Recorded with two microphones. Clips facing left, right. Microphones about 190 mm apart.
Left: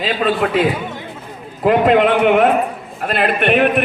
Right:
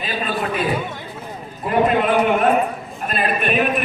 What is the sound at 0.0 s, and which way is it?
A man's voice, 85° left.